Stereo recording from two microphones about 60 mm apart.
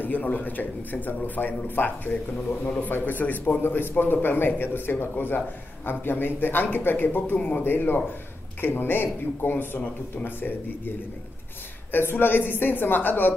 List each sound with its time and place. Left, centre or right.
0.0 s a man's voice: left
11.9 s a man's voice: left